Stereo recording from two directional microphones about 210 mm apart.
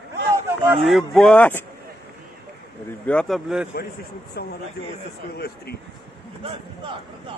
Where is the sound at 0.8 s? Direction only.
Centre (ahead or behind).